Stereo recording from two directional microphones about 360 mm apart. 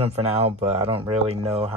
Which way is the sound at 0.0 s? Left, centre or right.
Centre.